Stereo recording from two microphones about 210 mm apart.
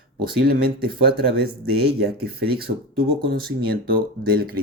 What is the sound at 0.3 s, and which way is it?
Speech, 45° right (ahead or behind).